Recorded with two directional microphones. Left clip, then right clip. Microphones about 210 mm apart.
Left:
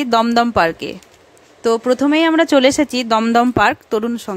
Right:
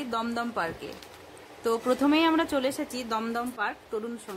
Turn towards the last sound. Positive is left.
turn(degrees=45)  # may be behind; listen again after turning